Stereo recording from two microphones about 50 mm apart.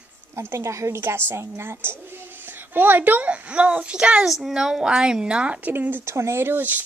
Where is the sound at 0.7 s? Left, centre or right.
Right.